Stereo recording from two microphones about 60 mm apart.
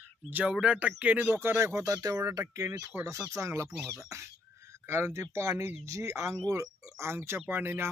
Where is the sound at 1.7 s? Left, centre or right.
Right.